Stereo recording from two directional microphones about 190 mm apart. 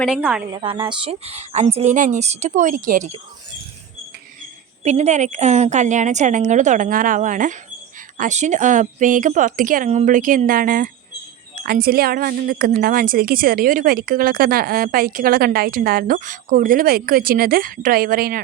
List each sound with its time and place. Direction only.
0.0 s speech: 5° right (ahead or behind)
0.5 s a woman's voice: 25° right (ahead or behind); by 3.2 s 40° right (ahead or behind)
4.8 s a woman's voice: 35° right (ahead or behind)